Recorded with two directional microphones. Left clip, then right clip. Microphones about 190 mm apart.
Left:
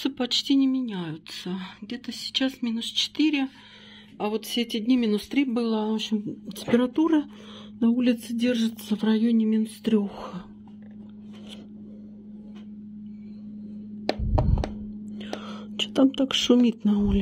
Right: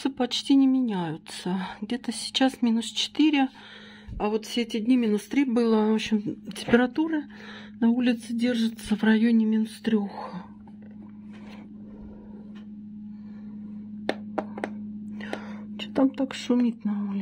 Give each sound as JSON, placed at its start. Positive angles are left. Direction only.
{"t": 0.0, "sound": "speech", "side_deg": -5}
{"t": 4.2, "sound": "speech", "side_deg": 0}
{"t": 15.1, "sound": "whispering", "side_deg": -10}
{"t": 15.5, "sound": "whispering", "side_deg": 20}
{"t": 16.2, "sound": "speech", "side_deg": 15}